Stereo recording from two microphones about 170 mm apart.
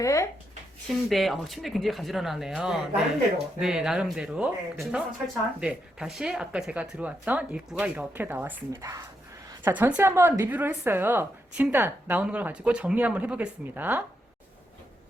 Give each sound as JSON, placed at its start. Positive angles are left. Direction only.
{"t": 0.0, "sound": "speech", "side_deg": 20}
{"t": 0.9, "sound": "a woman's voice", "side_deg": 0}